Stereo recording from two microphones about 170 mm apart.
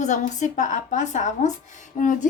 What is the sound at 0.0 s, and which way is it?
A woman's voice, 45° left (ahead or behind).